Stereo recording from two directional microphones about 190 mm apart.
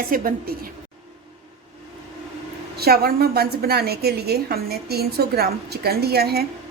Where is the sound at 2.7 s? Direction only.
55° right (ahead or behind).